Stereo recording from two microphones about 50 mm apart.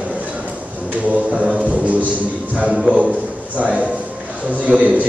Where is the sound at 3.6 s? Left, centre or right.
Right.